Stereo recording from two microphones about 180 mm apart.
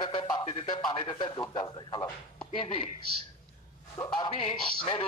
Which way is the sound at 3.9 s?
20° left (ahead or behind).